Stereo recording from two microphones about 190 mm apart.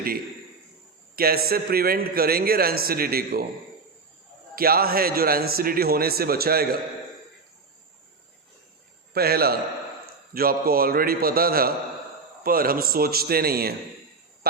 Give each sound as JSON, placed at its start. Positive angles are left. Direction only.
{"t": 1.1, "sound": "a man's voice", "side_deg": -55}
{"t": 4.5, "sound": "a man's voice", "side_deg": -50}
{"t": 9.1, "sound": "a man's voice", "side_deg": -55}